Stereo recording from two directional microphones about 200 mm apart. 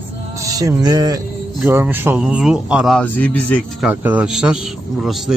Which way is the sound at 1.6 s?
10° right (ahead or behind).